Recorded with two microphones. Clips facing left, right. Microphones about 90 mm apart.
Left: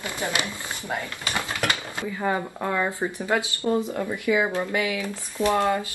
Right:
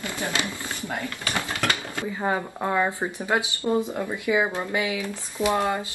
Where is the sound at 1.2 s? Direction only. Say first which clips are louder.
Even; 20° left (ahead or behind).